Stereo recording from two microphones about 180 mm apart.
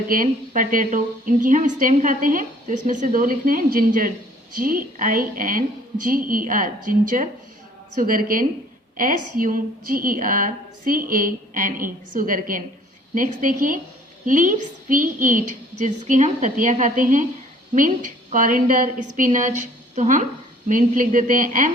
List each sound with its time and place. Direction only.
0.1 s a woman's voice: 50° right (ahead or behind)